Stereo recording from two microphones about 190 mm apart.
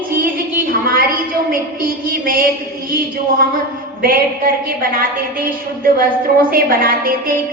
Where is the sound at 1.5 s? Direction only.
50° right (ahead or behind).